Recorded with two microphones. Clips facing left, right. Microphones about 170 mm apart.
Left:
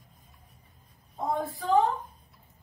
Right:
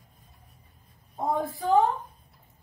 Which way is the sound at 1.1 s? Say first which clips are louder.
Right 2 dB; 25° right (ahead or behind).